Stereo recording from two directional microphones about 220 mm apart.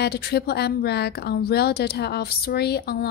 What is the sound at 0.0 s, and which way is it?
A woman's voice, 45° left (ahead or behind).